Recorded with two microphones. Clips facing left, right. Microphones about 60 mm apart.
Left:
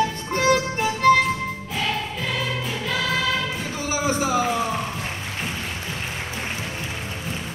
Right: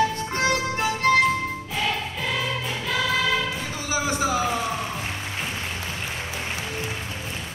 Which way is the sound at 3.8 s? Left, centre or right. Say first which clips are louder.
Left 1 dB; left.